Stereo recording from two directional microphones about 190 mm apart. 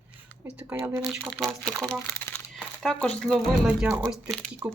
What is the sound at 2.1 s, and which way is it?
Crumpling, 10° left (ahead or behind).